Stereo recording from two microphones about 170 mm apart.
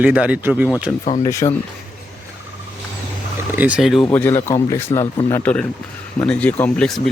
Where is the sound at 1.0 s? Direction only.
40° left (ahead or behind).